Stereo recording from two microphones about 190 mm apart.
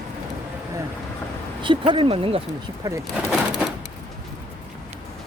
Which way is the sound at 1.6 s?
25° right (ahead or behind).